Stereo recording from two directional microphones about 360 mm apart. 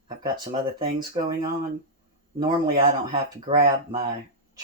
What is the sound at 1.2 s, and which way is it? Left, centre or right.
Speech, centre.